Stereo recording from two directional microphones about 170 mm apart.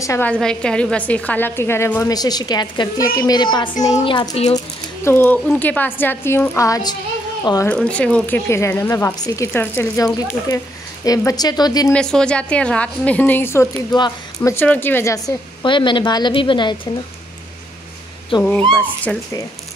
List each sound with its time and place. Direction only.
0.0 s speech: 15° left (ahead or behind)
0.3 s a woman's voice: 5° left (ahead or behind); by 4.5 s 25° left (ahead or behind)
5.0 s speech: 10° left (ahead or behind)
7.6 s a woman's voice: 5° left (ahead or behind); by 11.9 s 25° left (ahead or behind)
11.9 s speech: 5° left (ahead or behind)
13.9 s speech: 25° left (ahead or behind)
14.5 s speech: 10° left (ahead or behind)
15.6 s a woman's voice: 30° left (ahead or behind)
18.3 s a woman's voice: 30° left (ahead or behind)
18.7 s speech: 10° left (ahead or behind)